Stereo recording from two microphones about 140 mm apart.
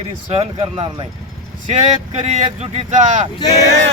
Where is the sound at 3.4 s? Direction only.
25° left (ahead or behind).